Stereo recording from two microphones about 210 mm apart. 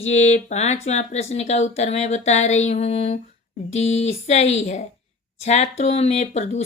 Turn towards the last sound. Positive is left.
turn(degrees=30)  # may be behind; listen again after turning